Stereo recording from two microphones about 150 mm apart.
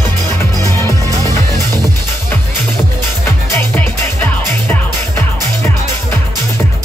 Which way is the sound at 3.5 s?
15° left (ahead or behind).